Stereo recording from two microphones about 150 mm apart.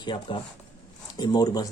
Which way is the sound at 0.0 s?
30° left (ahead or behind).